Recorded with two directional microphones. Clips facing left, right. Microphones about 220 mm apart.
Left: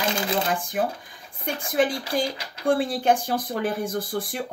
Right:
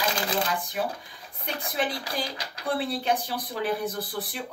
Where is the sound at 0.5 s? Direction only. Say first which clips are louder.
Left 4 dB; 50° left (ahead or behind).